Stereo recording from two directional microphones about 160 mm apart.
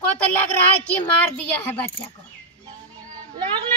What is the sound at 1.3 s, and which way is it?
Speech, 10° left (ahead or behind).